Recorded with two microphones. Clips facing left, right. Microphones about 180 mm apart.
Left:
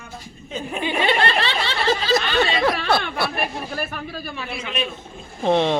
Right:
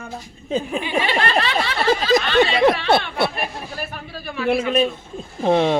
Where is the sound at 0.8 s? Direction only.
30° left (ahead or behind).